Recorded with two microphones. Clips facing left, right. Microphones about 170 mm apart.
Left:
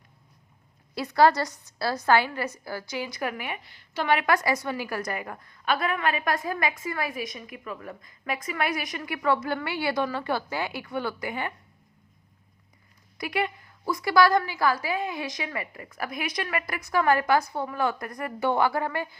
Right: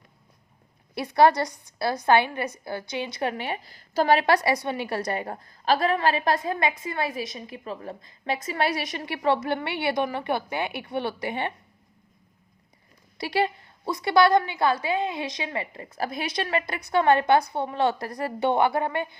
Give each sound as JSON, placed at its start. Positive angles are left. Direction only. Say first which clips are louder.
{"t": 0.9, "sound": "a woman's voice", "louder": "right 1 dB", "side_deg": -25}
{"t": 4.4, "sound": "a woman's voice", "louder": "right 2 dB", "side_deg": -20}
{"t": 13.1, "sound": "a woman's voice", "louder": "right 4 dB", "side_deg": -30}